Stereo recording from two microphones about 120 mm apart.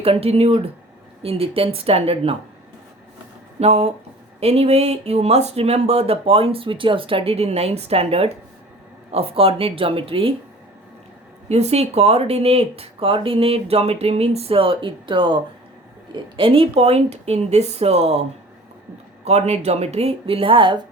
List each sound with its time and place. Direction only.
0.0 s speech: 55° right (ahead or behind)
3.6 s speech: 60° right (ahead or behind)
11.4 s speech: 60° right (ahead or behind); by 15.4 s 45° right (ahead or behind)
16.4 s speech: 50° right (ahead or behind)